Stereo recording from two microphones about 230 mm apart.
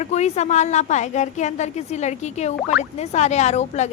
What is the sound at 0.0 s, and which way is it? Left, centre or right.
A woman's voice, left.